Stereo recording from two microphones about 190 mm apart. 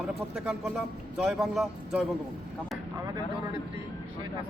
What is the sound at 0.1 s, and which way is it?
A man's voice, 5° right (ahead or behind).